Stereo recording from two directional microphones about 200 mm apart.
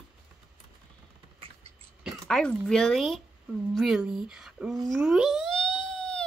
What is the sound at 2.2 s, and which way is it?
Speech, 5° left (ahead or behind).